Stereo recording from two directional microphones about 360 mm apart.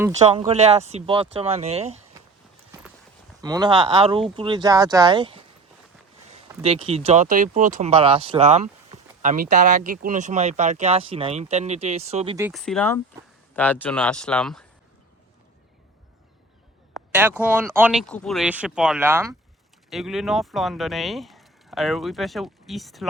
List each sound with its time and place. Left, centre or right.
0.0 s speech: centre
3.4 s speech: centre
12.5 s speech: centre
17.1 s speech: centre